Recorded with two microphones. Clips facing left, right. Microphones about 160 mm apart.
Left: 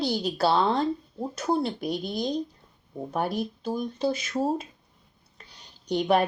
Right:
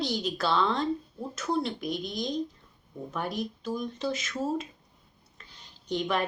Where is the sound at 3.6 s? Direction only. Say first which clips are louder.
Left 5 dB; 35° left (ahead or behind).